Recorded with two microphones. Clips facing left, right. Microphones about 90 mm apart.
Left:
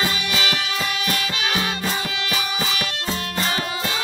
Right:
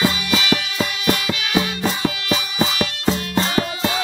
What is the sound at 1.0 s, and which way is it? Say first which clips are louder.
Music: right 3 dB; 25° right (ahead or behind).